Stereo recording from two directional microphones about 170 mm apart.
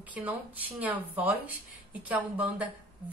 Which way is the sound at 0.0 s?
10° right (ahead or behind).